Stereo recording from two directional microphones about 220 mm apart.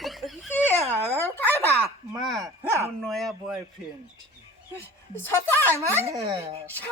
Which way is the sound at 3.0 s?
Centre (ahead or behind).